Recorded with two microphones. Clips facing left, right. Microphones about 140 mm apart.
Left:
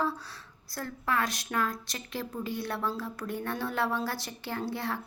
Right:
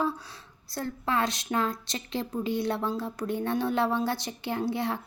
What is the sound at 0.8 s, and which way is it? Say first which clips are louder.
Speech: right 3 dB; 25° right (ahead or behind).